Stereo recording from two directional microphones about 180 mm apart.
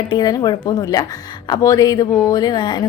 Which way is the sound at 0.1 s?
20° left (ahead or behind).